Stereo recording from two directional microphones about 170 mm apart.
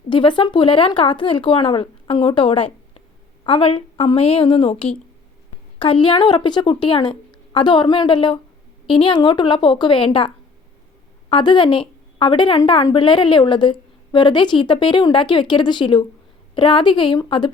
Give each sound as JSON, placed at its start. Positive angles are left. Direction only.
{"t": 0.1, "sound": "a woman's voice", "side_deg": 30}